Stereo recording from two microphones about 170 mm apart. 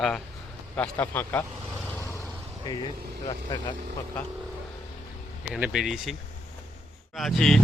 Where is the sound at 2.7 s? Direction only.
25° left (ahead or behind).